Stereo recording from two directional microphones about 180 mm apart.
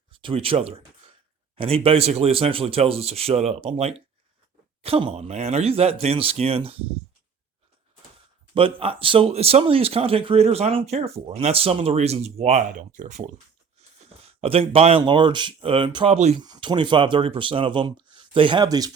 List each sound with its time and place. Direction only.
0.1 s speech: 30° right (ahead or behind)
8.5 s speech: 30° right (ahead or behind)
14.3 s speech: 30° right (ahead or behind)
16.4 s speech: 25° right (ahead or behind)